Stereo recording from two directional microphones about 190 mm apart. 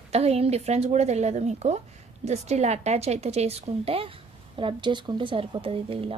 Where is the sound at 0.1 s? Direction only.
35° right (ahead or behind).